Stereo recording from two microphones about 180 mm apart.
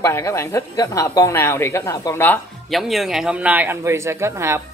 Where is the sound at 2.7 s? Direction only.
Centre (ahead or behind).